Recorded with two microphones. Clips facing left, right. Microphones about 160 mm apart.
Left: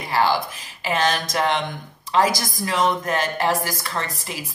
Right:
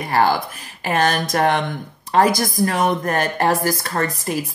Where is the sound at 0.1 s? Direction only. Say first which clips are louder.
Right 2 dB; 50° right (ahead or behind).